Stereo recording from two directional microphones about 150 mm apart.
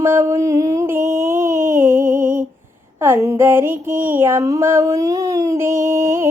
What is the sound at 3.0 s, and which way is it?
Music, 15° right (ahead or behind).